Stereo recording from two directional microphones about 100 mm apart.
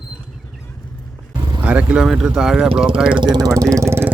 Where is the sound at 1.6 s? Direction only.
15° right (ahead or behind).